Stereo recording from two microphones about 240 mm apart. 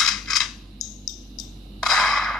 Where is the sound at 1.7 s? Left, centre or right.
Centre.